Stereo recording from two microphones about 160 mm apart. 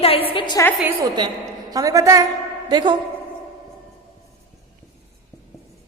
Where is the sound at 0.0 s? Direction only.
35° left (ahead or behind).